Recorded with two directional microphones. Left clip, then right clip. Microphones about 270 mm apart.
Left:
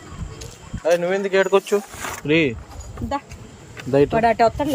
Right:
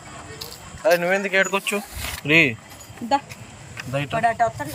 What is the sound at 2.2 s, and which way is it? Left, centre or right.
Speech, centre.